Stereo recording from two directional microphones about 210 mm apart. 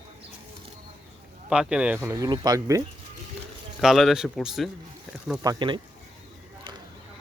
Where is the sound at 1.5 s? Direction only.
5° right (ahead or behind).